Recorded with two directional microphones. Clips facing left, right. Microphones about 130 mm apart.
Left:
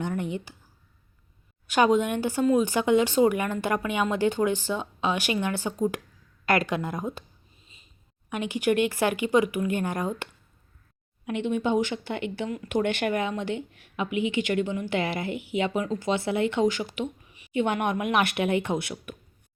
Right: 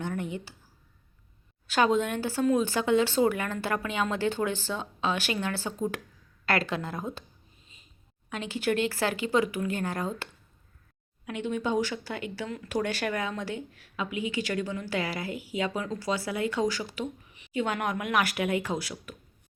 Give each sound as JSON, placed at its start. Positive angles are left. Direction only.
{"t": 0.0, "sound": "speech", "side_deg": 20}
{"t": 1.6, "sound": "speech", "side_deg": 15}
{"t": 8.3, "sound": "speech", "side_deg": 15}
{"t": 11.3, "sound": "speech", "side_deg": 20}
{"t": 17.0, "sound": "a sound", "side_deg": 10}
{"t": 17.5, "sound": "speech", "side_deg": 20}